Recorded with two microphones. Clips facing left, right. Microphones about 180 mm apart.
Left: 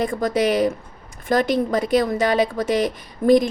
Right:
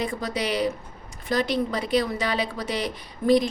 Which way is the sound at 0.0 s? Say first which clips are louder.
Left 8 dB; 50° left (ahead or behind).